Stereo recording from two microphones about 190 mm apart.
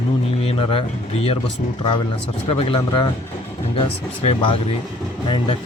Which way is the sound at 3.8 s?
30° left (ahead or behind).